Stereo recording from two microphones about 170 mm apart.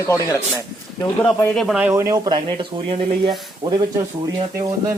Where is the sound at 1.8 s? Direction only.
15° right (ahead or behind).